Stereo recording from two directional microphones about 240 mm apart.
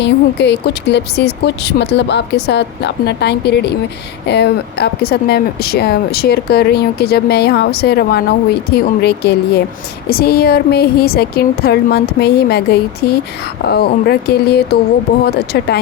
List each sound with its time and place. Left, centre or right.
0.0 s speech: left